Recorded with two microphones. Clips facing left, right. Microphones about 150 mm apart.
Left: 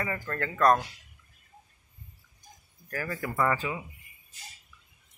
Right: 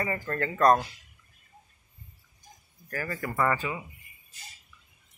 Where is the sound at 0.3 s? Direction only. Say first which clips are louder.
Right 1 dB; 25° right (ahead or behind).